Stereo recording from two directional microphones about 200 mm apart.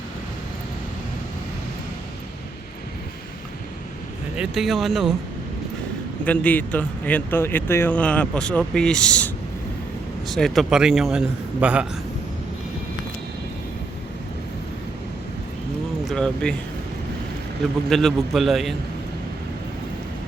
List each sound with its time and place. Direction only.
4.4 s a man's voice: centre (ahead or behind)
6.2 s a man's voice: 5° left (ahead or behind)
16.0 s a man's voice: 5° left (ahead or behind)
17.8 s a man's voice: centre (ahead or behind)